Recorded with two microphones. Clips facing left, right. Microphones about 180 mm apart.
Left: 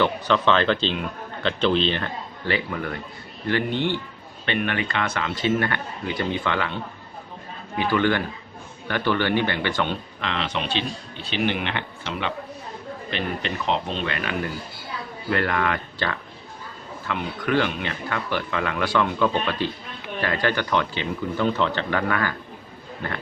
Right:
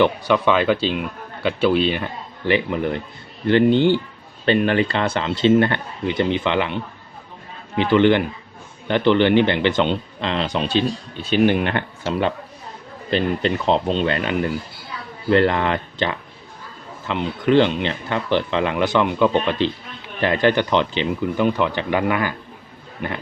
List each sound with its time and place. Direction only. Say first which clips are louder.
0.0 s a man's voice: right 4 dB; 10° right (ahead or behind)
7.8 s speech: right 6 dB; 20° right (ahead or behind)
10.2 s speech: right 5 dB; 35° right (ahead or behind)
13.1 s a man's voice: right 9 dB; 35° right (ahead or behind); by 22.4 s 15° right (ahead or behind)